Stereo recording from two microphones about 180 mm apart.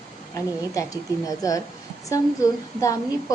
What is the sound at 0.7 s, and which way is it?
A woman's voice, 20° left (ahead or behind).